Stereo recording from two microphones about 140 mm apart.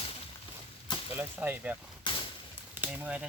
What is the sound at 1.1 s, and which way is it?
Chop, 10° right (ahead or behind).